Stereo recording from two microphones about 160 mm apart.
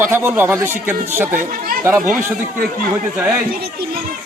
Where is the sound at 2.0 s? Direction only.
55° right (ahead or behind).